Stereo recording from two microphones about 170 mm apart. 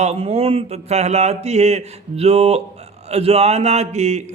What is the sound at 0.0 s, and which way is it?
Speech, 40° right (ahead or behind).